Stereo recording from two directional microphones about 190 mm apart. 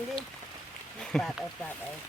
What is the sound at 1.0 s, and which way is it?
Speech, centre (ahead or behind).